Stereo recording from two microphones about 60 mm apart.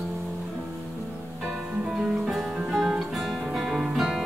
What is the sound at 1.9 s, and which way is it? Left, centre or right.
Music, centre.